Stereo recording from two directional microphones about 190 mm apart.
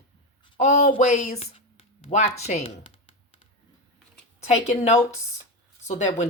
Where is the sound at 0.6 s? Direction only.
35° left (ahead or behind).